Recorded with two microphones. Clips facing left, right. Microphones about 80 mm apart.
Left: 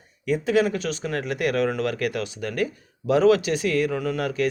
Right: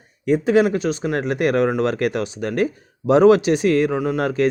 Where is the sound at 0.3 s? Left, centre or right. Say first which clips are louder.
Right 5 dB; right.